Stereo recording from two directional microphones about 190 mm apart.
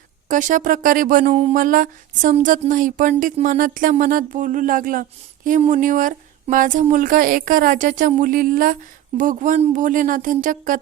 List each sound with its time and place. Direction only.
0.3 s speech: 45° right (ahead or behind)
1.5 s speech: 45° right (ahead or behind)